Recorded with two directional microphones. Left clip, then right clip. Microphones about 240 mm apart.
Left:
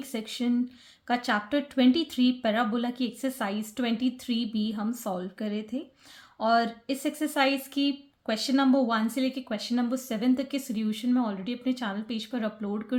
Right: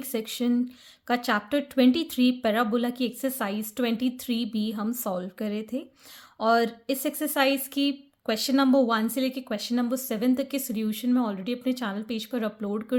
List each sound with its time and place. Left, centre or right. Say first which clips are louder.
0.0 s speech: right 3 dB; right